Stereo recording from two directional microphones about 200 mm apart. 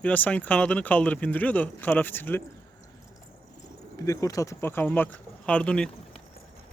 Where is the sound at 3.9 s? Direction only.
15° left (ahead or behind).